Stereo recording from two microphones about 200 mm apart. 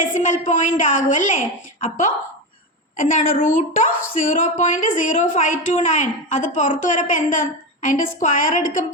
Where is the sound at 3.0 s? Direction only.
40° left (ahead or behind).